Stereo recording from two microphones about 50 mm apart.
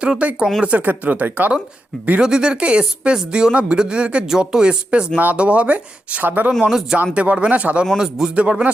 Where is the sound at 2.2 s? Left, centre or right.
Centre; by 6.5 s right.